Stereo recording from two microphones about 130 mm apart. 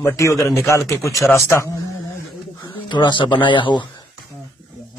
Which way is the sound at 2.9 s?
35° left (ahead or behind).